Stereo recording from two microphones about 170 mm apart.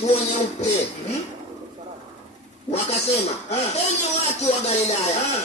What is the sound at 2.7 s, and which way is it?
Speech, 40° left (ahead or behind).